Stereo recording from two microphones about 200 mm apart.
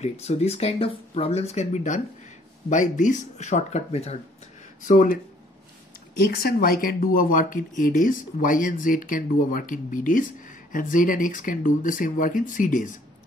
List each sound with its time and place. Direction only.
0.0 s speech: 30° left (ahead or behind)
6.3 s speech: 50° left (ahead or behind)